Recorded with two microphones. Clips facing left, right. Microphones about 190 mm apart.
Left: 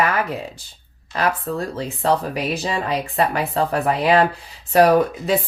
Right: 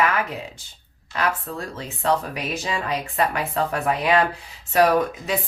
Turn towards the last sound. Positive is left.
turn(degrees=40)  # may be behind; listen again after turning